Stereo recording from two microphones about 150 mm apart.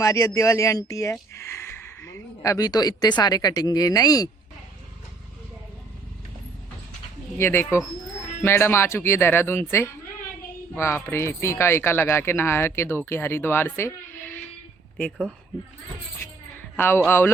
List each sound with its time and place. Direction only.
0.0 s speech: 20° left (ahead or behind)
7.3 s speech: 15° left (ahead or behind)
16.7 s a man's voice: 15° left (ahead or behind)